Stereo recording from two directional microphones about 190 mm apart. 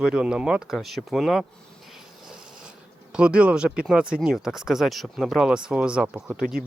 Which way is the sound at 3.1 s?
5° right (ahead or behind).